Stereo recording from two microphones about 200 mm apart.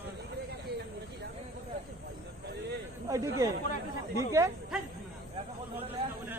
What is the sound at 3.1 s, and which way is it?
Speech, 15° right (ahead or behind).